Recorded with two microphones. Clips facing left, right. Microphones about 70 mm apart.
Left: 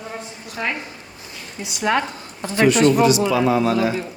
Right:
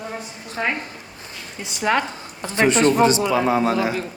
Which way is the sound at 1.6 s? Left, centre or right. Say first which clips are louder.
Even; right.